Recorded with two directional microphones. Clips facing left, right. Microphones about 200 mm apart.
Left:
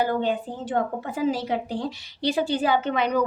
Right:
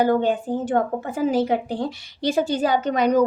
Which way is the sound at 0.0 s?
45° right (ahead or behind).